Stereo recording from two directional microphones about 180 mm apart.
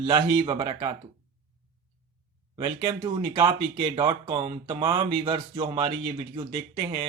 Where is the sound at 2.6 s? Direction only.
25° right (ahead or behind).